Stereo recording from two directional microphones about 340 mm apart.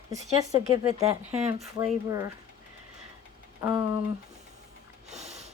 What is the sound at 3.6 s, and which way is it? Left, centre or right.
Speech, centre.